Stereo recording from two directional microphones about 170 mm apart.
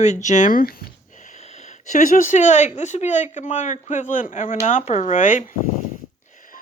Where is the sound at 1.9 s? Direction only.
45° left (ahead or behind).